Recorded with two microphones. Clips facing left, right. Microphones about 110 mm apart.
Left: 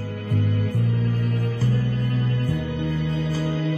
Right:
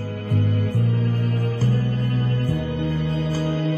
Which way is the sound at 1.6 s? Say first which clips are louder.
Right 1 dB; 40° right (ahead or behind).